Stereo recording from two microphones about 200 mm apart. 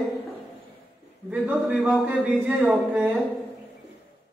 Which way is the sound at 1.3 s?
10° right (ahead or behind).